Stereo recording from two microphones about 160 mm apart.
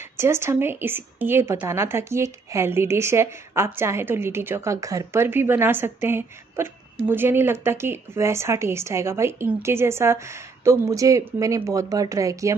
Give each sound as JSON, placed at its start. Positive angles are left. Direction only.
{"t": 0.2, "sound": "a woman's voice", "side_deg": -15}